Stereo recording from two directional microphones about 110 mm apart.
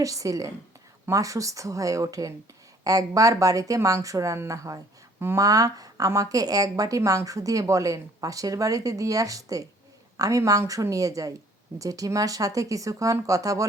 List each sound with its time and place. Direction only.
0.0 s a woman's voice: 30° right (ahead or behind)